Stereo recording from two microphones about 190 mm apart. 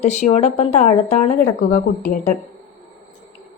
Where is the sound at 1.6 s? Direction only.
55° left (ahead or behind).